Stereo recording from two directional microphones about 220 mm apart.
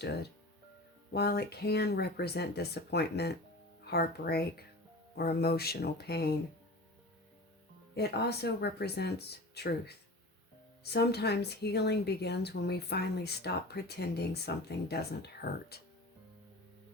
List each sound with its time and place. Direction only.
1.1 s speech: 45° left (ahead or behind)
7.9 s speech: 45° left (ahead or behind)